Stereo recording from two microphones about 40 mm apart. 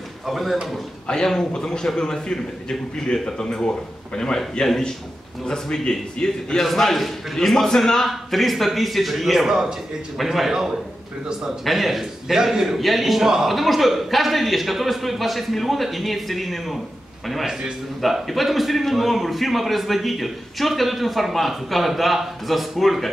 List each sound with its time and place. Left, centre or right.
0.3 s a man's voice: centre
1.0 s a man's voice: centre
6.6 s a man's voice: centre
8.1 s a man's voice: centre
9.5 s a man's voice: centre
10.1 s a man's voice: centre
11.6 s a man's voice: centre
13.3 s a man's voice: centre
13.6 s a man's voice: centre
17.5 s a man's voice: centre
18.2 s a man's voice: centre